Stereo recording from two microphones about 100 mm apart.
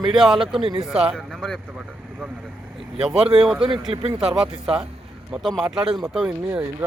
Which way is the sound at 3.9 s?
70° right (ahead or behind).